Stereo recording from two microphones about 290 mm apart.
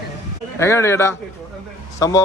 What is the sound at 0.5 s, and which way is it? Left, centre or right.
Speech, centre.